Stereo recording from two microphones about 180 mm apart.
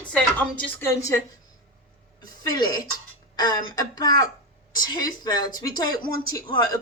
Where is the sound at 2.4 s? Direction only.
25° left (ahead or behind).